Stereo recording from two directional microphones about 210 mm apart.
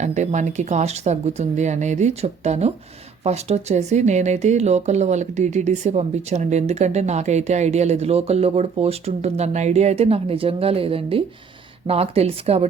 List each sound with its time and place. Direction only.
0.0 s speech: 35° right (ahead or behind)